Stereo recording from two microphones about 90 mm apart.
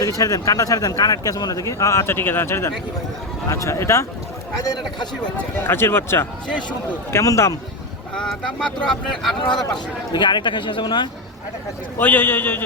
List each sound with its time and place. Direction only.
0.0 s speech: 40° left (ahead or behind)
5.6 s a man's voice: 25° left (ahead or behind)
8.1 s speech: 10° left (ahead or behind)
10.1 s speech: 55° left (ahead or behind)
11.9 s a man's voice: 20° left (ahead or behind)